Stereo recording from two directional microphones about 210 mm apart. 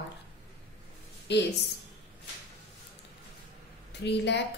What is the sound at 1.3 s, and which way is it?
Speech, 55° left (ahead or behind).